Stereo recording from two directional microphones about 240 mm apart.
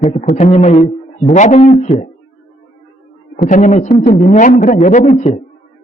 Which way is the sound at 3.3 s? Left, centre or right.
Left.